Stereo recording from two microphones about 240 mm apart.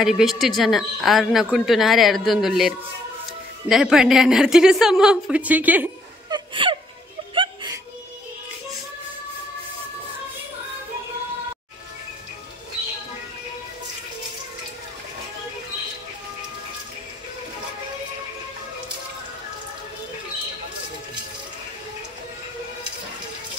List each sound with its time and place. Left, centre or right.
0.0 s a woman's voice: centre
6.3 s whimper: right
7.3 s a sound: centre